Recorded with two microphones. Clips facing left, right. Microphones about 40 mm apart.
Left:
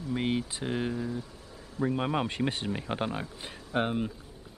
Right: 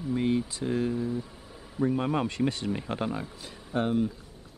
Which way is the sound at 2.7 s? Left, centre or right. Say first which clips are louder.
Right 1 dB; centre.